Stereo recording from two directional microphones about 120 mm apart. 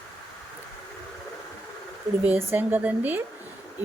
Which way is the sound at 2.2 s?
15° right (ahead or behind).